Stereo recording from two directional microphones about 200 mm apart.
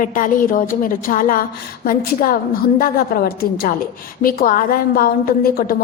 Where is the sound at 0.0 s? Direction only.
40° left (ahead or behind).